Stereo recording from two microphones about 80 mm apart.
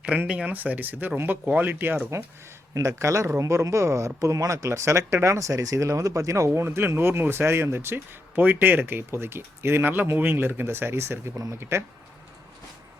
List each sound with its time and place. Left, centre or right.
0.3 s speech: centre
2.7 s speech: right